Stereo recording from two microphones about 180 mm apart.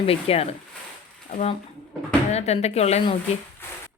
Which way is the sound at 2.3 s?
35° left (ahead or behind).